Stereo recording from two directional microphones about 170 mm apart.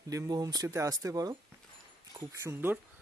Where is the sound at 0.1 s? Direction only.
20° right (ahead or behind).